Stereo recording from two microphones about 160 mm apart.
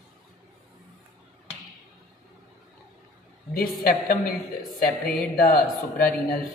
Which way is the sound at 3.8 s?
65° left (ahead or behind).